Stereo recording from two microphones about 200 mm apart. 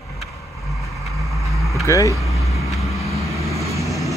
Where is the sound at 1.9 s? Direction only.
15° left (ahead or behind).